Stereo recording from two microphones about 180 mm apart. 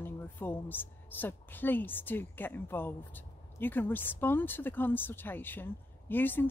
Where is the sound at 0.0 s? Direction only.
10° left (ahead or behind).